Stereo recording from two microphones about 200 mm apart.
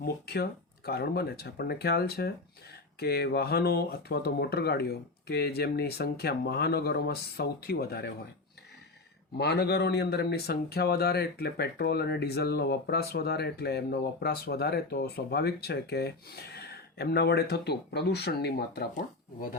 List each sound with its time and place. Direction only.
0.0 s speech: 50° left (ahead or behind)
9.4 s speech: 55° left (ahead or behind)